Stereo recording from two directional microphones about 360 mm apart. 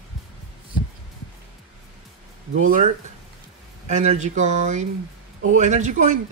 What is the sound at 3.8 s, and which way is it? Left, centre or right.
Speech, centre.